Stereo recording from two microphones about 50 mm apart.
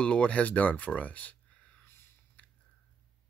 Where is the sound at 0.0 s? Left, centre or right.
Left.